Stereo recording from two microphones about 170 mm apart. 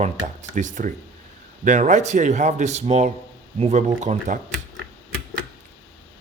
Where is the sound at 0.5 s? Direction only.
50° right (ahead or behind).